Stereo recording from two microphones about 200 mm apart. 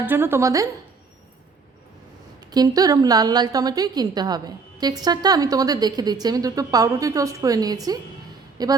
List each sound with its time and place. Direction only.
0.0 s a woman's voice: 10° right (ahead or behind)
2.5 s a woman's voice: 20° right (ahead or behind)